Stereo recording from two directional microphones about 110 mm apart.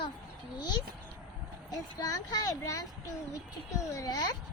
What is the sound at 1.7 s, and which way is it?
A child's voice, 35° left (ahead or behind).